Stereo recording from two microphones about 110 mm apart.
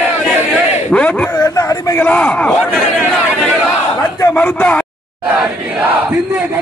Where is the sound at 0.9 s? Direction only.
10° left (ahead or behind).